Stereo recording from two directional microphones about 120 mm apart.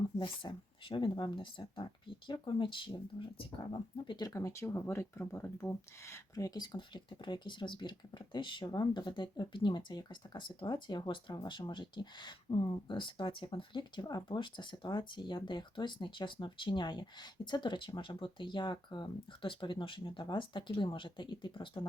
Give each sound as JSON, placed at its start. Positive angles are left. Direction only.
{"t": 0.2, "sound": "speech", "side_deg": 45}